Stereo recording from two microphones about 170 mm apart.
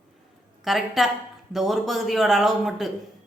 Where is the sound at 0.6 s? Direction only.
Centre (ahead or behind).